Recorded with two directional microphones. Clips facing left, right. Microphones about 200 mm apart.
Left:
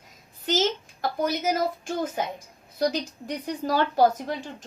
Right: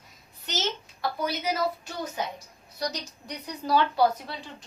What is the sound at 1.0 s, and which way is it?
Speech, 45° left (ahead or behind).